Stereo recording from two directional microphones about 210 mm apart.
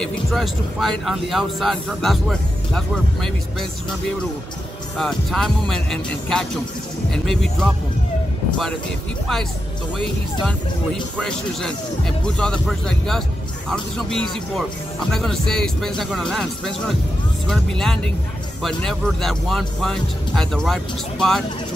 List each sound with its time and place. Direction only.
0.0 s speech: centre (ahead or behind)
4.9 s speech: centre (ahead or behind)
10.4 s speech: 5° left (ahead or behind)